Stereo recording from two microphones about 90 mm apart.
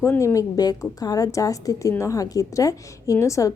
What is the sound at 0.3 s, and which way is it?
A woman's voice, 45° left (ahead or behind).